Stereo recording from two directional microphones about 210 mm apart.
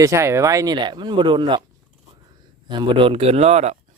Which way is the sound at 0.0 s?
15° right (ahead or behind).